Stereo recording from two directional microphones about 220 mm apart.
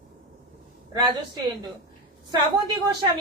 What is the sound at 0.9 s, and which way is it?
Speech, 20° right (ahead or behind).